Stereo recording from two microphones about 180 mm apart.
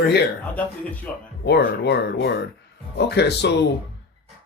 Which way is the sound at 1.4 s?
70° left (ahead or behind).